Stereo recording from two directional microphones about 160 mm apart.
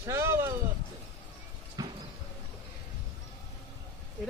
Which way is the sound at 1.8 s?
25° right (ahead or behind).